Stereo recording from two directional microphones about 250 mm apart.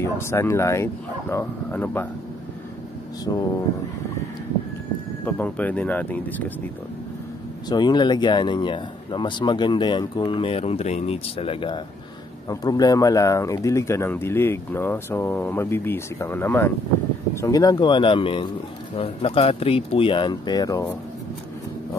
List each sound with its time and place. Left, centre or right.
0.0 s speech: centre
3.3 s speech: centre
5.2 s speech: centre
7.7 s speech: centre